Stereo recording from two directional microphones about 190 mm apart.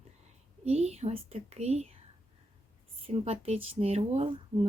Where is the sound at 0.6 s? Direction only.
35° right (ahead or behind).